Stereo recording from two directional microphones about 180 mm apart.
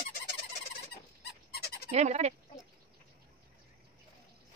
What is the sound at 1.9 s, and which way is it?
Fowl, 40° right (ahead or behind).